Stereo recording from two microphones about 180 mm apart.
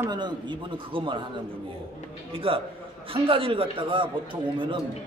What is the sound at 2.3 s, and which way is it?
A man's voice, 30° right (ahead or behind).